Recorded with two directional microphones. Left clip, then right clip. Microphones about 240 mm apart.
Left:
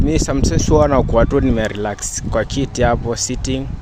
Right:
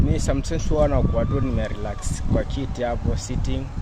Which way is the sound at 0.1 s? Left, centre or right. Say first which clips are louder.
Left 8 dB; left.